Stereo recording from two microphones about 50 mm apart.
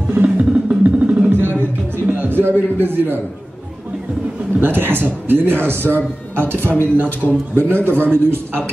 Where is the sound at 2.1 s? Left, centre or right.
Right.